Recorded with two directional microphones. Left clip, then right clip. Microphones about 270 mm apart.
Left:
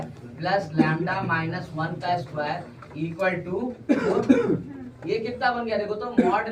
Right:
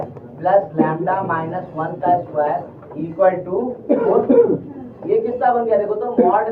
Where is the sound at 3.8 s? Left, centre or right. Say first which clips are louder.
Right 6 dB; left.